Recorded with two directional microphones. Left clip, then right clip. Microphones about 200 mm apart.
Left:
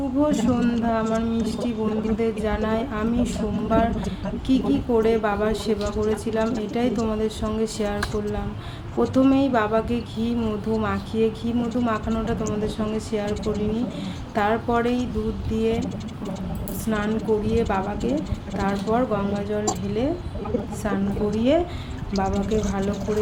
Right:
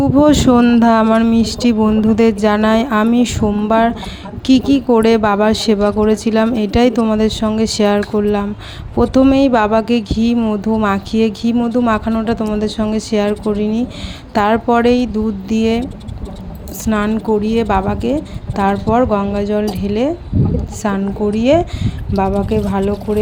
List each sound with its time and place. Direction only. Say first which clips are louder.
0.2 s speech: right 11 dB; 50° right (ahead or behind)
16.8 s a woman's voice: right 8 dB; 45° right (ahead or behind)